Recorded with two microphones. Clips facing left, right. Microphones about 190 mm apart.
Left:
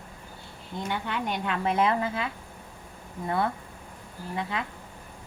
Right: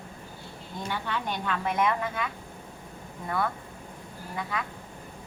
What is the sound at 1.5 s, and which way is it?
A woman's voice, 30° left (ahead or behind).